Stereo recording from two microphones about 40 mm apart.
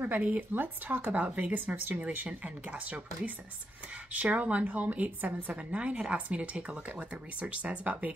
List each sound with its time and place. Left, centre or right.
0.0 s speech: right
1.1 s speech: right
2.0 s speech: right
5.8 s speech: right